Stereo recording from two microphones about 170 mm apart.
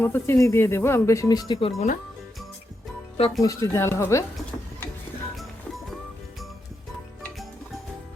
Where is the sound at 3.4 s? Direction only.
20° left (ahead or behind).